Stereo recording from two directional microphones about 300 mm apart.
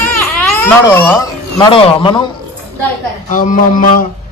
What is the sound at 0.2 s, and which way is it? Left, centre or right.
A child's voice, centre.